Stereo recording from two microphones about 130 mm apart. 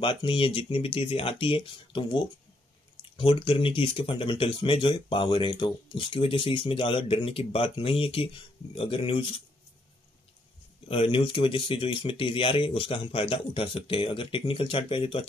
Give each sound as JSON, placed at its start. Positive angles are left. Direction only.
{"t": 0.0, "sound": "speech", "side_deg": 40}
{"t": 10.9, "sound": "speech", "side_deg": 45}